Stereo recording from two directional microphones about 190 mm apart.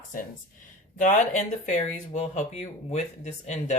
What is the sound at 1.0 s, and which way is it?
Speech, 40° left (ahead or behind).